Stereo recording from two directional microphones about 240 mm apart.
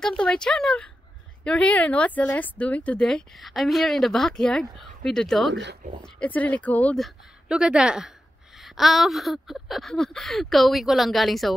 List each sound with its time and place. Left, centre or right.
0.0 s a woman's voice: centre
5.5 s speech: right
6.1 s a woman's voice: centre